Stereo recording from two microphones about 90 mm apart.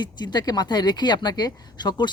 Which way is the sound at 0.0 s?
55° left (ahead or behind).